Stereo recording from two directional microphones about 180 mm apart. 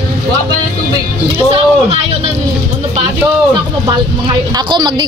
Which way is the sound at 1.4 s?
30° right (ahead or behind).